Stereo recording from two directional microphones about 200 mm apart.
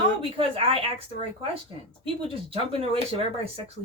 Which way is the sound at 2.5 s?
30° right (ahead or behind).